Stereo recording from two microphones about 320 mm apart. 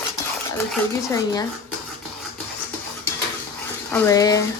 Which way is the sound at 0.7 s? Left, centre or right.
Centre.